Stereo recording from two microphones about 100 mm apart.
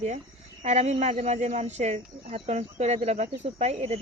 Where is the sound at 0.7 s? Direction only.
90° right.